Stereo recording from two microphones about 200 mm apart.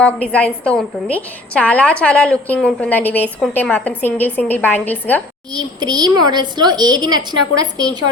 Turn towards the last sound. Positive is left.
turn(degrees=-20)  # may be behind; listen again after turning